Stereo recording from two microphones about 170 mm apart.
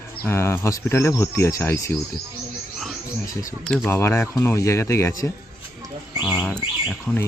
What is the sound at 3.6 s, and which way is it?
Speech, 5° left (ahead or behind).